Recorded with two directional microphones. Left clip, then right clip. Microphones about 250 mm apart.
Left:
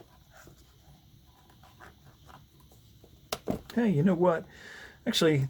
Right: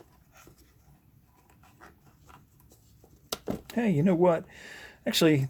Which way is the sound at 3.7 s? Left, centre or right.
Centre.